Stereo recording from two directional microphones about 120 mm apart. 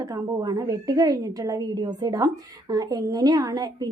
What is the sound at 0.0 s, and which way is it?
A woman's voice, 30° right (ahead or behind).